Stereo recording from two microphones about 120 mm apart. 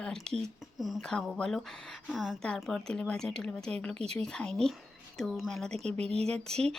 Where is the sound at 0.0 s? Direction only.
5° left (ahead or behind).